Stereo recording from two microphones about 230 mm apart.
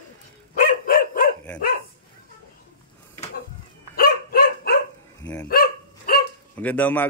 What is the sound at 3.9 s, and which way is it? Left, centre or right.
Dog, left.